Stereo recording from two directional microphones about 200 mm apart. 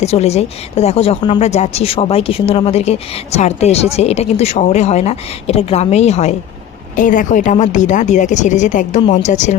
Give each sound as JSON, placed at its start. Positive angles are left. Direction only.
{"t": 0.0, "sound": "a woman's voice", "side_deg": 30}